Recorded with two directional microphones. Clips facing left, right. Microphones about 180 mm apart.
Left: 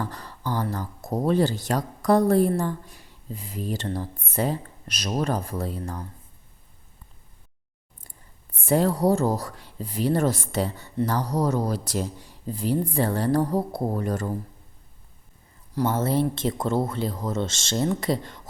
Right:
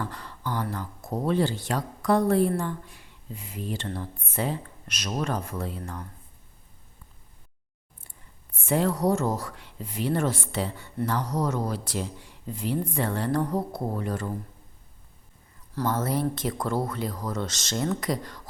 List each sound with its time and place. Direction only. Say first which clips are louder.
0.0 s speech: left 2 dB; 40° left (ahead or behind)
8.5 s speech: left 3 dB; 35° left (ahead or behind)
15.9 s speech: left 2 dB; 25° left (ahead or behind)